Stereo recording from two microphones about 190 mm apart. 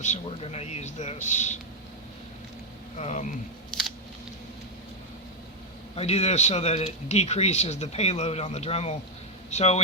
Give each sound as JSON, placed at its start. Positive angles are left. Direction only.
{"t": 0.0, "sound": "speech", "side_deg": 35}
{"t": 3.0, "sound": "speech", "side_deg": 40}
{"t": 3.7, "sound": "a sound", "side_deg": 0}
{"t": 6.0, "sound": "speech", "side_deg": 35}